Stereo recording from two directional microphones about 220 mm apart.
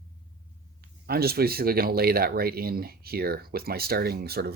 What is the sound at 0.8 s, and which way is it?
Speech, 45° right (ahead or behind).